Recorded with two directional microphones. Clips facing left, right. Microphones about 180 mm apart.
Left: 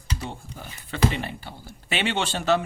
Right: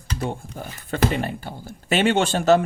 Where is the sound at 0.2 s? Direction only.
50° right (ahead or behind).